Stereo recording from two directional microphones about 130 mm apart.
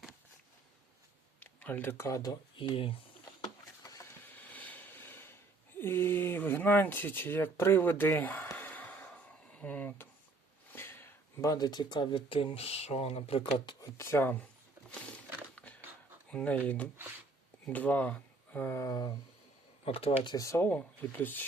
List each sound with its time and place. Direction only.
1.4 s speech: 15° left (ahead or behind)
2.6 s speech: 40° left (ahead or behind)
3.4 s a sound: 25° left (ahead or behind)
4.3 s a sound: 10° left (ahead or behind)
5.8 s speech: 15° left (ahead or behind); by 13.5 s 50° left (ahead or behind)
13.7 s speech: 25° left (ahead or behind)
14.9 s a sound: 10° left (ahead or behind)
16.3 s speech: 10° left (ahead or behind); by 19.1 s 30° left (ahead or behind)
19.8 s speech: 45° left (ahead or behind)
20.2 s speech: 30° left (ahead or behind)
20.7 s speech: 10° left (ahead or behind)